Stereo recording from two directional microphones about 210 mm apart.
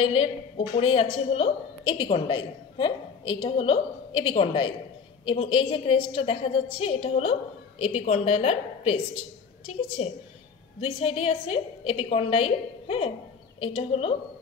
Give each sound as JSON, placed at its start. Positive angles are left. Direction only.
{"t": 0.0, "sound": "a woman's voice", "side_deg": 25}
{"t": 10.0, "sound": "a woman's voice", "side_deg": 30}